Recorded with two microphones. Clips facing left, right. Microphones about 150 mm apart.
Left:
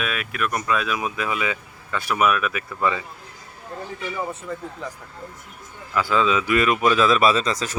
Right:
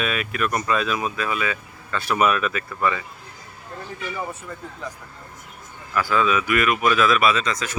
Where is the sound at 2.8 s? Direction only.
20° left (ahead or behind).